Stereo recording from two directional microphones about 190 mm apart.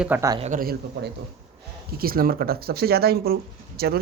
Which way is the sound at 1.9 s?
50° right (ahead or behind).